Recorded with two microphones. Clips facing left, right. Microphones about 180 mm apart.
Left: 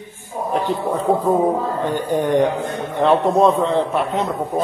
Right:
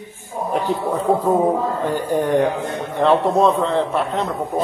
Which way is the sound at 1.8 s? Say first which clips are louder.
Left 1 dB; 5° right (ahead or behind).